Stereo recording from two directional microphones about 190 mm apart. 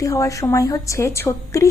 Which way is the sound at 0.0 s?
15° left (ahead or behind).